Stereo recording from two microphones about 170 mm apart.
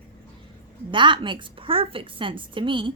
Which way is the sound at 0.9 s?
30° right (ahead or behind).